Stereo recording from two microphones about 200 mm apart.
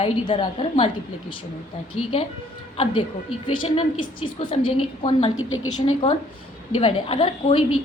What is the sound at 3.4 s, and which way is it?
A woman's voice, 25° left (ahead or behind).